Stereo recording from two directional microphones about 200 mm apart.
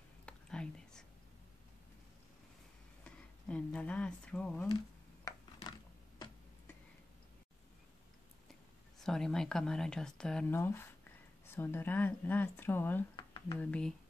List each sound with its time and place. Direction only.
0.2 s whispering: 5° left (ahead or behind)
3.0 s speech: 5° left (ahead or behind)
4.6 s a sound: 20° left (ahead or behind)
9.0 s speech: 5° left (ahead or behind)
13.1 s a sound: 25° left (ahead or behind)
13.6 s speech: 5° left (ahead or behind)